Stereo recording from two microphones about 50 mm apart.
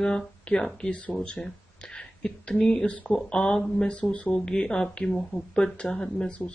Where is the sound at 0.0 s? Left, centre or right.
Centre.